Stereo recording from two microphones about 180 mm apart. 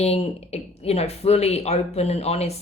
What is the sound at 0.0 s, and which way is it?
Speech, 35° left (ahead or behind).